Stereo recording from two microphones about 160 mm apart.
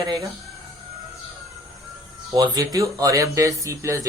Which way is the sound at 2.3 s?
20° right (ahead or behind).